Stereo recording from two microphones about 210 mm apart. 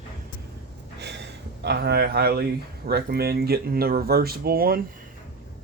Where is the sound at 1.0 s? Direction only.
55° right (ahead or behind).